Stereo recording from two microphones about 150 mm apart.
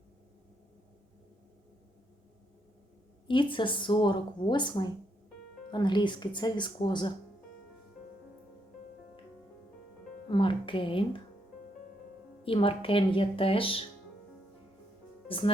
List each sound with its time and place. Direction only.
3.2 s speech: 35° left (ahead or behind)
10.2 s speech: 30° left (ahead or behind)
12.5 s speech: 35° left (ahead or behind)
15.3 s speech: 35° left (ahead or behind)